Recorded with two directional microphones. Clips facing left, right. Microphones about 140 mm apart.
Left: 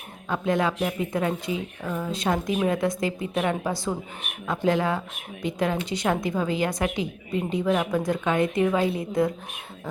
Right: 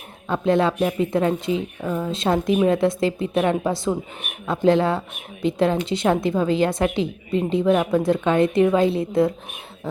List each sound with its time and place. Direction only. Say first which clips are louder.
0.3 s a woman's voice: right 5 dB; 25° right (ahead or behind)
0.7 s speech: right 5 dB; 15° right (ahead or behind)
0.9 s a woman's voice: right 6 dB; 25° right (ahead or behind)